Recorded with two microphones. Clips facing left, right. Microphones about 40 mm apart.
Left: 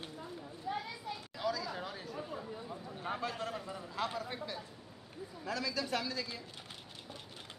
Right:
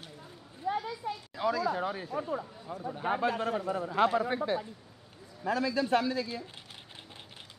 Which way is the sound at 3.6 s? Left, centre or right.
Right.